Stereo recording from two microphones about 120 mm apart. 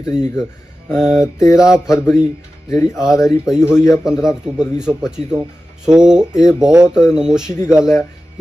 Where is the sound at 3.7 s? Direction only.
20° left (ahead or behind).